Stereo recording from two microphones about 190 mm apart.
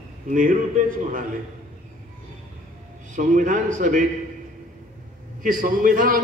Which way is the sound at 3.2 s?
40° right (ahead or behind).